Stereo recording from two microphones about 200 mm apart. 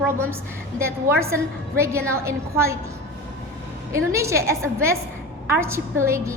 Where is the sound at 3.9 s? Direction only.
15° right (ahead or behind).